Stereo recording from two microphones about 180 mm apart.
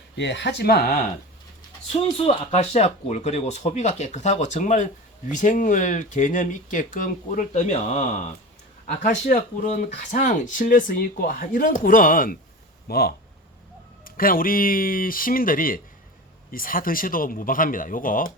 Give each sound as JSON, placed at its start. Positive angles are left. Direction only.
{"t": 0.2, "sound": "speech", "side_deg": 80}
{"t": 2.1, "sound": "speech", "side_deg": 35}
{"t": 9.3, "sound": "speech", "side_deg": 45}